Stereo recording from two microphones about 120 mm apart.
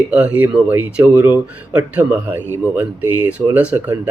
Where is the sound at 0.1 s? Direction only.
15° right (ahead or behind).